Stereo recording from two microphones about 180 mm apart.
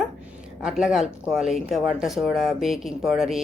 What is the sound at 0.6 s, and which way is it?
Speech, 5° right (ahead or behind).